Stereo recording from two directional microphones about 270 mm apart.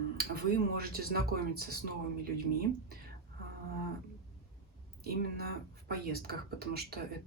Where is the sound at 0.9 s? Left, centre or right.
Right.